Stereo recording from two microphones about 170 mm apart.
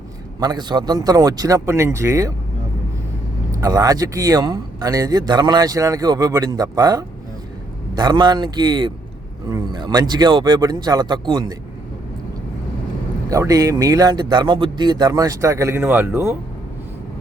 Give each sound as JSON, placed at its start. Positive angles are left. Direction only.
{"t": 0.3, "sound": "speech", "side_deg": -25}
{"t": 3.5, "sound": "speech", "side_deg": -20}
{"t": 13.3, "sound": "speech", "side_deg": -20}